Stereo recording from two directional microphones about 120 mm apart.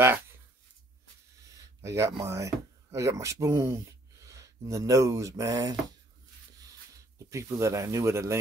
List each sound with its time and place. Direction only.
1.8 s speech: 25° right (ahead or behind)
7.2 s speech: 25° right (ahead or behind)